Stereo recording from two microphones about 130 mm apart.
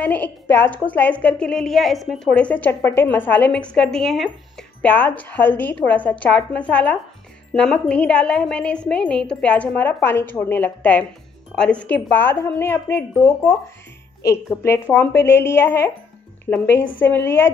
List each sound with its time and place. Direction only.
0.0 s a woman's voice: 15° left (ahead or behind)